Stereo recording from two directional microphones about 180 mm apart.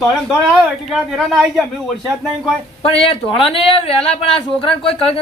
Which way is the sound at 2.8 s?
30° left (ahead or behind).